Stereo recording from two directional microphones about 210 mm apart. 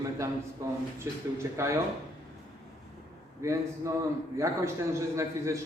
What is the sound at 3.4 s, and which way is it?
A man's voice, 15° right (ahead or behind).